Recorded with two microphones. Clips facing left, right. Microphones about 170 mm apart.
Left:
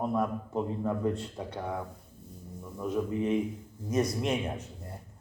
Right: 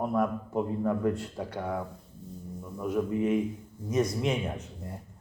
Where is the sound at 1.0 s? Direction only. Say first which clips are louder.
Right 2 dB; 30° left (ahead or behind).